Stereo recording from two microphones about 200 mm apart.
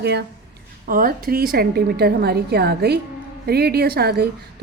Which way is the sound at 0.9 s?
45° right (ahead or behind).